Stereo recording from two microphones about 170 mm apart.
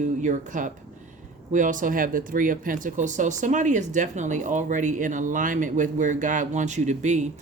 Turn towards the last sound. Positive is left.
turn(degrees=-45)  # may be behind; listen again after turning